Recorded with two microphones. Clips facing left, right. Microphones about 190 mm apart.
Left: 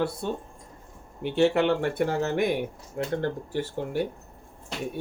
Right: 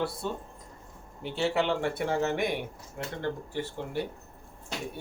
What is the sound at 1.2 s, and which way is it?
Speech, 55° left (ahead or behind).